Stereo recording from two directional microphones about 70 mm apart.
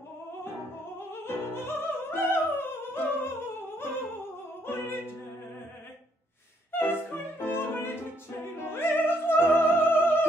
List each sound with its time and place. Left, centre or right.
0.9 s opera: left
6.8 s music: left
8.5 s opera: left